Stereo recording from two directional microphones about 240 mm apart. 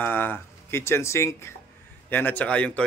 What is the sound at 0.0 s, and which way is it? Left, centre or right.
A man's voice, centre.